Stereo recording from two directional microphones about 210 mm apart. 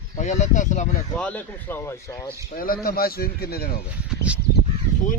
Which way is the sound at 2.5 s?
45° left (ahead or behind).